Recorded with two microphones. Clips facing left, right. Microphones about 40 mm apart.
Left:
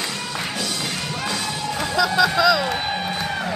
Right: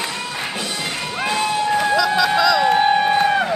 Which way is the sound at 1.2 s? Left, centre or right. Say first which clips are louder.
Right 9 dB; right.